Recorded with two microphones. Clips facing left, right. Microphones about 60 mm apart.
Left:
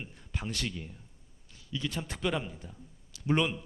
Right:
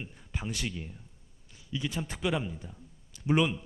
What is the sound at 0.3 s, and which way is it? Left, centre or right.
A man's voice, centre.